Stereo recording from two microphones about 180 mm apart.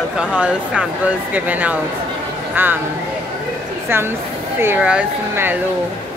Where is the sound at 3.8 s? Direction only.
15° right (ahead or behind).